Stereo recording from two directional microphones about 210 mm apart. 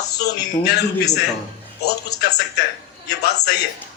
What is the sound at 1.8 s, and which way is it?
Speech, 50° left (ahead or behind).